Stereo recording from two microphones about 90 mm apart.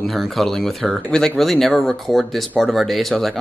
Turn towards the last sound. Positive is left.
turn(degrees=0)  # may be behind; listen again after turning